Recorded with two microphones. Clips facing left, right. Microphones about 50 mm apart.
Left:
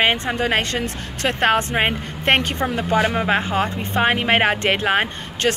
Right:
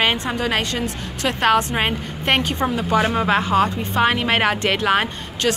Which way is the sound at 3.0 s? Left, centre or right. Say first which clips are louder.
Right 1 dB; left.